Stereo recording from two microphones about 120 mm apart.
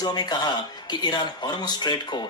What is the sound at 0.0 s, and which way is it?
Speech, 35° left (ahead or behind).